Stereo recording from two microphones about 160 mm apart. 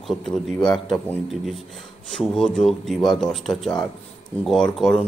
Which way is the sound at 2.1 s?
5° left (ahead or behind).